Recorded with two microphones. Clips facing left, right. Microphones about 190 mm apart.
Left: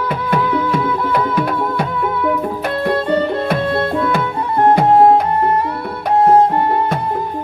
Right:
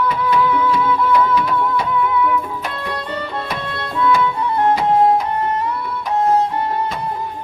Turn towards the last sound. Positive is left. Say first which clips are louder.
# left 5 dB
turn(degrees=55)  # may be behind; listen again after turning